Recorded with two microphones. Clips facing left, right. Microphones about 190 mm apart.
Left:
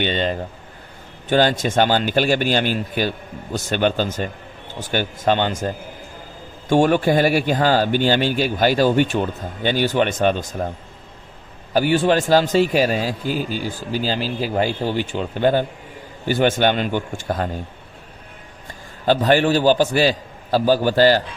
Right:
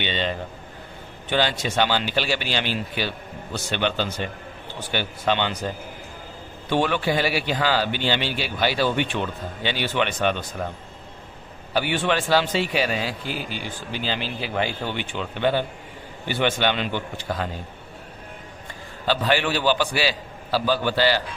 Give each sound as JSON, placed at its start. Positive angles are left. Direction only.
{"t": 0.0, "sound": "a man's voice", "side_deg": 45}
{"t": 11.7, "sound": "a man's voice", "side_deg": 40}
{"t": 19.0, "sound": "a man's voice", "side_deg": 45}